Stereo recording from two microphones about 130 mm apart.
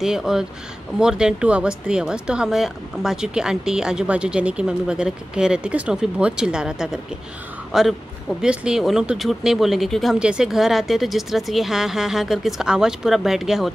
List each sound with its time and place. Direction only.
0.0 s speech: 5° right (ahead or behind)